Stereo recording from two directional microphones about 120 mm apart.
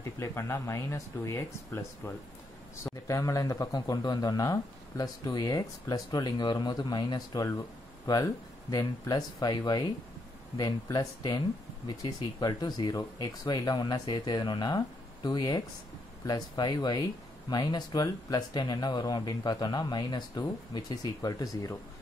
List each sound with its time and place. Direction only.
0.2 s a man's voice: 20° left (ahead or behind)